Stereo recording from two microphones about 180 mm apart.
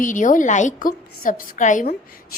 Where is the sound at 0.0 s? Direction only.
45° left (ahead or behind).